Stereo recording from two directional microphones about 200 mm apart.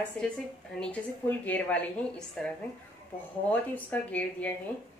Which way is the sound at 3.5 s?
10° left (ahead or behind).